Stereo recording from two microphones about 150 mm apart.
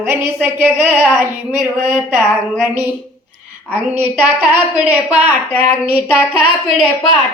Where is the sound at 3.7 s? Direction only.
15° right (ahead or behind).